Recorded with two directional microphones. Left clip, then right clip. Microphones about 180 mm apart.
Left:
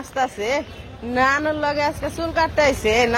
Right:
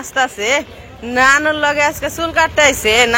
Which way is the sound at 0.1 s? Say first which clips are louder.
Right 6 dB; centre (ahead or behind).